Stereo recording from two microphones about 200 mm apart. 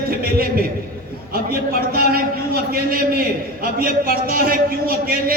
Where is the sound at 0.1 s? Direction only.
50° right (ahead or behind).